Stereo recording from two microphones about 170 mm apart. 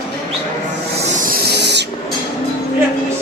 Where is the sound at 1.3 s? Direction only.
75° right (ahead or behind).